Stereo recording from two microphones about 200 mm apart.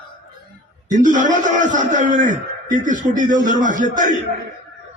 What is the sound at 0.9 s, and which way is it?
A man's voice, 40° right (ahead or behind).